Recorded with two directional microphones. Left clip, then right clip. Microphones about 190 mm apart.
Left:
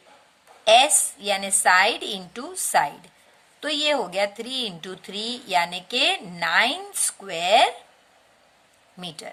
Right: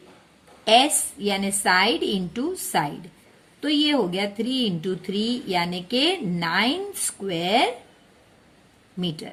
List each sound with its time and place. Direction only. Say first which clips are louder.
0.6 s speech: left 2 dB; 30° left (ahead or behind)
9.0 s speech: right 4 dB; 30° left (ahead or behind)